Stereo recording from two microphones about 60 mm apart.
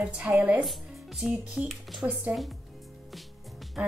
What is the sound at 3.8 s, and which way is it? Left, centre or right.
Speech, right.